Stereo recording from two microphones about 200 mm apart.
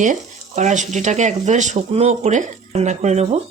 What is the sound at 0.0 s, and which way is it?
A woman's voice, 35° right (ahead or behind).